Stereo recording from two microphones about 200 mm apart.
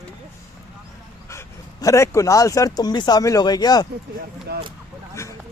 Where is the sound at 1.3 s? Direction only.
15° left (ahead or behind).